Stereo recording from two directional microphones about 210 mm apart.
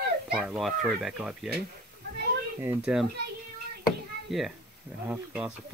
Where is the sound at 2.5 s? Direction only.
5° right (ahead or behind).